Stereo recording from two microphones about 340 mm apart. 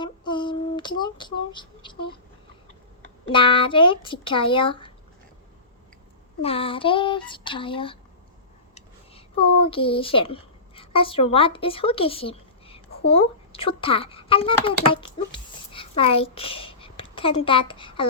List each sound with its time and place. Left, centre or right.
0.0 s female singing: centre
3.2 s speech: centre
6.4 s speech: centre